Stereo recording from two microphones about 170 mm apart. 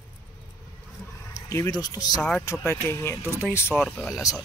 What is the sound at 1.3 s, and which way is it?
Speech, 15° left (ahead or behind).